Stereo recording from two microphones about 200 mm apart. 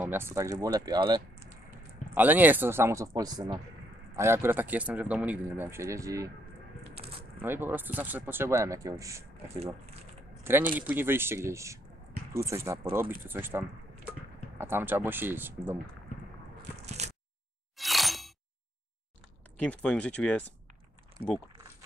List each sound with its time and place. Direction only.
0.0 s speech: 10° right (ahead or behind)
2.1 s speech: 10° right (ahead or behind)
7.0 s coin: 30° right (ahead or behind)
7.4 s speech: 10° right (ahead or behind)
9.6 s speech: 30° right (ahead or behind)
10.4 s speech: 10° right (ahead or behind)
16.7 s crushing: 35° right (ahead or behind)
17.7 s a sound: centre (ahead or behind)
19.6 s speech: 5° left (ahead or behind)